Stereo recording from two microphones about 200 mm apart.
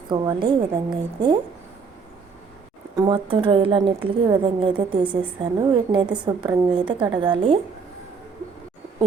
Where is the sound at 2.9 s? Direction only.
25° right (ahead or behind).